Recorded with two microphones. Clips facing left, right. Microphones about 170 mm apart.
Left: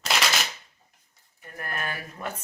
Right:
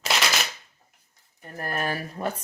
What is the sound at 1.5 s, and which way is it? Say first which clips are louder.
Speech: right 5 dB; 35° right (ahead or behind).